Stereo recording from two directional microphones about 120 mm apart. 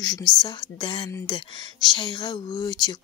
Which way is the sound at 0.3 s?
40° left (ahead or behind).